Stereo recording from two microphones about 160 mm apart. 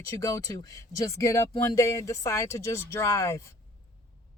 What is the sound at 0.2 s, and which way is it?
Speech, 20° left (ahead or behind).